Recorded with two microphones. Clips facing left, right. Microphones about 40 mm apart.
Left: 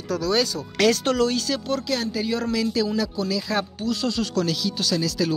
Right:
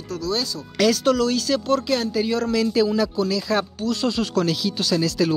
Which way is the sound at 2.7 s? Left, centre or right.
Centre.